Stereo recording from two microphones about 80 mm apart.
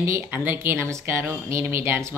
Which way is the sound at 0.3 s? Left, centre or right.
Right.